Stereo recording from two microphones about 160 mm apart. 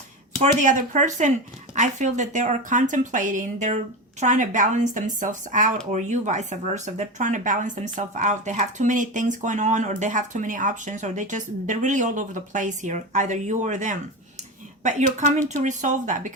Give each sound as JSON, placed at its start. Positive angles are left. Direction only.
{"t": 0.4, "sound": "speech", "side_deg": -50}